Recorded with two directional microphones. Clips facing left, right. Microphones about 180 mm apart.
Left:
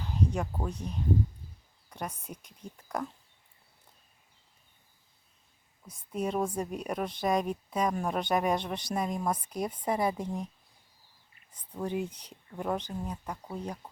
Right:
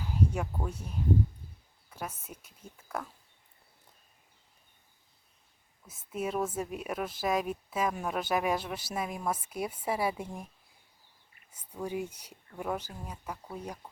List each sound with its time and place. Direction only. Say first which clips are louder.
0.0 s a sound: even; 10° right (ahead or behind)
0.6 s speech: left 1 dB; 5° right (ahead or behind)
5.9 s speech: left 2 dB; 5° right (ahead or behind)
11.8 s speech: left 2 dB; 10° right (ahead or behind)